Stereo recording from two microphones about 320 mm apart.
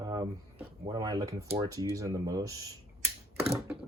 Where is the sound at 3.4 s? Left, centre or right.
Centre.